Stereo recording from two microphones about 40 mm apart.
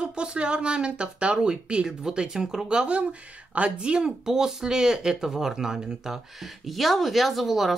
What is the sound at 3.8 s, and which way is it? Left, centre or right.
Speech, right.